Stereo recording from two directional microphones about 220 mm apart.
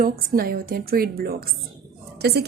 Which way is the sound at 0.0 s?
40° right (ahead or behind).